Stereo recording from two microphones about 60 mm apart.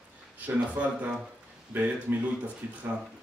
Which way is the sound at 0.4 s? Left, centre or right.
Right.